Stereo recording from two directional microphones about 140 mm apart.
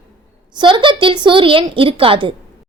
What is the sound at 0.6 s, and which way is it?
A woman's voice, 35° right (ahead or behind).